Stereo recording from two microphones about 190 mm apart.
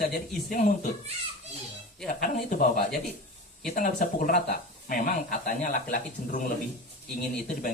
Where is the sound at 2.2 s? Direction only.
45° left (ahead or behind).